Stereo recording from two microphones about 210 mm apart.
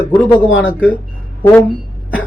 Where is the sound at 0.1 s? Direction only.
20° left (ahead or behind).